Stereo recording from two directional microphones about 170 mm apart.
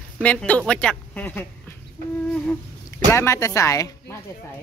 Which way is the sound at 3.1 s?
15° left (ahead or behind).